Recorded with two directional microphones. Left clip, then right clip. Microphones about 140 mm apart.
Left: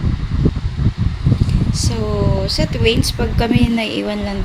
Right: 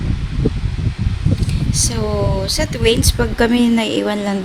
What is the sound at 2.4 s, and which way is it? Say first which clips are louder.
A woman's voice: even; 50° right (ahead or behind).